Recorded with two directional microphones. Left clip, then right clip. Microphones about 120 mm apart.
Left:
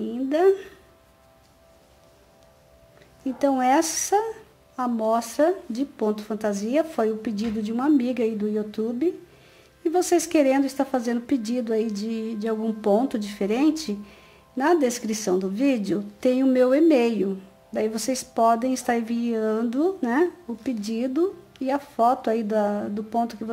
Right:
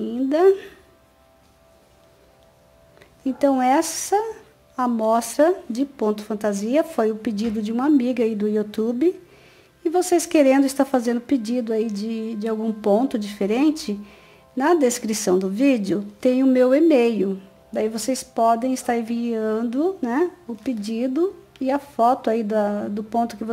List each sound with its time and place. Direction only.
0.0 s a sound: 25° right (ahead or behind)
3.3 s a woman's voice: 20° right (ahead or behind)
9.8 s speech: 15° right (ahead or behind)
11.1 s speech: 15° right (ahead or behind)